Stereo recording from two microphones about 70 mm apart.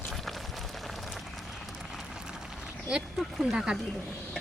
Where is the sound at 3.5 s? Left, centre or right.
Centre.